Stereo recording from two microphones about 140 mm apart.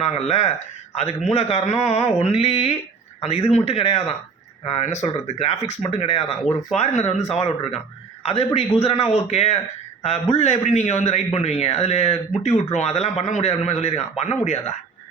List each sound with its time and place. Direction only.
0.0 s a man's voice: 50° left (ahead or behind)